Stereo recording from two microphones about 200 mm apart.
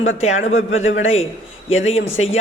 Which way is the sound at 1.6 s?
30° left (ahead or behind).